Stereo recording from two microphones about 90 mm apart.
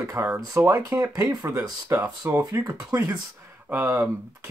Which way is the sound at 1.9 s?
30° right (ahead or behind).